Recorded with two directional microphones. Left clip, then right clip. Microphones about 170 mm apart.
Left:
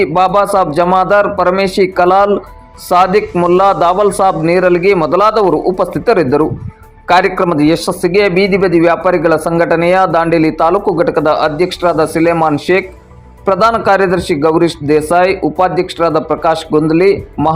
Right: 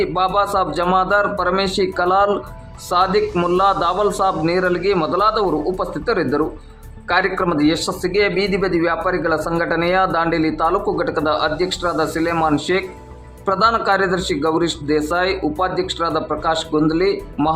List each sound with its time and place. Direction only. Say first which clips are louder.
0.0 s a man's voice: left 7 dB; 25° left (ahead or behind)